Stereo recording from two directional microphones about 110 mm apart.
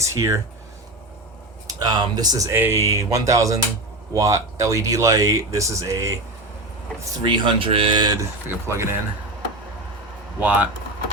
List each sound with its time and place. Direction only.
0.0 s speech: 25° right (ahead or behind)
1.6 s speech: 35° right (ahead or behind)
2.5 s speech: 20° right (ahead or behind)
7.0 s speech: 40° right (ahead or behind)
8.4 s speech: 25° right (ahead or behind)
10.4 s speech: 15° right (ahead or behind)